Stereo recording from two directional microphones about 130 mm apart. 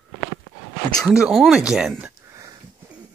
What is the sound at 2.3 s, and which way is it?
Wheeze, 25° right (ahead or behind).